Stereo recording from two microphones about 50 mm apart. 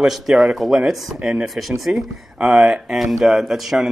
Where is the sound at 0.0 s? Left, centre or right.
Centre.